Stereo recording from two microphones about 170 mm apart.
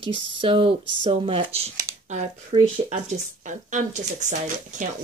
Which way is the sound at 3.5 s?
45° right (ahead or behind).